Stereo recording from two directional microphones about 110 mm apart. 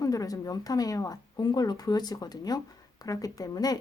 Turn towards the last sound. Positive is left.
turn(degrees=35)  # may be behind; listen again after turning